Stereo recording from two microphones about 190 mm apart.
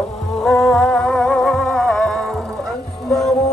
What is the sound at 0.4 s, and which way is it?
Music, centre (ahead or behind).